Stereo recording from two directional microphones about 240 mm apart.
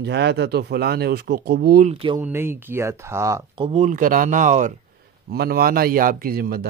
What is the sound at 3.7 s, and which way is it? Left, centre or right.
Speech, right.